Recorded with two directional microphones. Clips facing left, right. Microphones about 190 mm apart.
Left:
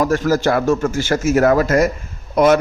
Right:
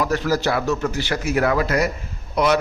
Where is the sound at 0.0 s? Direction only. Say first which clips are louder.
Left 5 dB; 45° left (ahead or behind).